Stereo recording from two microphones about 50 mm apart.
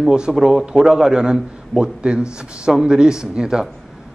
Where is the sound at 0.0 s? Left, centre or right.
Centre.